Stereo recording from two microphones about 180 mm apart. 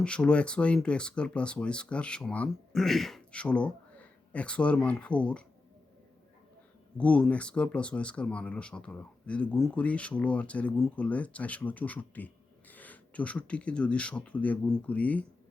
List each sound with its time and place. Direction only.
0.0 s speech: 5° left (ahead or behind)
6.9 s speech: 5° left (ahead or behind)